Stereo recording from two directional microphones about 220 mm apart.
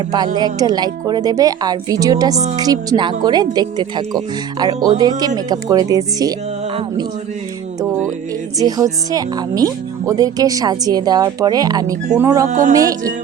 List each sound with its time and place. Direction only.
0.3 s speech: 20° right (ahead or behind)
8.5 s speech: 15° right (ahead or behind)
12.5 s speech: 35° right (ahead or behind)
12.7 s speech: 15° right (ahead or behind)